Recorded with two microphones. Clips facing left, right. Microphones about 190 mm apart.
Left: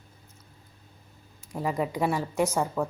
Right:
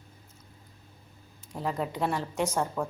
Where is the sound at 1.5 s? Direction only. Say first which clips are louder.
Left 3 dB; 10° left (ahead or behind).